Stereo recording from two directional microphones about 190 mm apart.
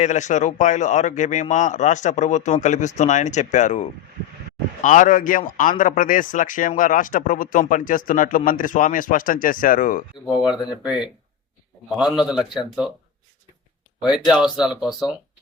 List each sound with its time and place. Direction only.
0.0 s a man's voice: 40° left (ahead or behind)
10.2 s speech: centre (ahead or behind)
12.2 s speech: centre (ahead or behind)
14.1 s speech: 5° right (ahead or behind)